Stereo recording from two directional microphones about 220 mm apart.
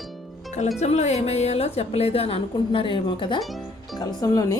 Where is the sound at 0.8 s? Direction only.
30° left (ahead or behind).